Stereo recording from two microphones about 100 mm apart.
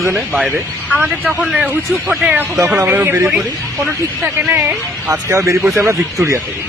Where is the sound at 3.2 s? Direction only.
Centre (ahead or behind).